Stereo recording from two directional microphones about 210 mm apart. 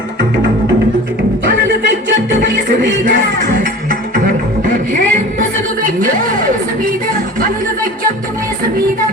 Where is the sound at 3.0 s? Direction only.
40° right (ahead or behind).